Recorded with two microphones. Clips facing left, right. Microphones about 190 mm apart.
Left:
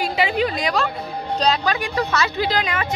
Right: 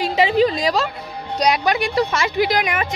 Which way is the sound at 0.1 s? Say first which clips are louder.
Right 5 dB; 35° right (ahead or behind).